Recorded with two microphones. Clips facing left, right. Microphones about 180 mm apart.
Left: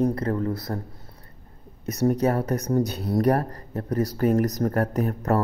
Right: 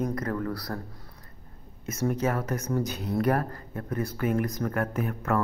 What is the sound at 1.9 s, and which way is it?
Speech, 35° left (ahead or behind).